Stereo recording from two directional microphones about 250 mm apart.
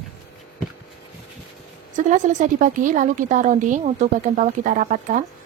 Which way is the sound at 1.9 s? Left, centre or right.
Right.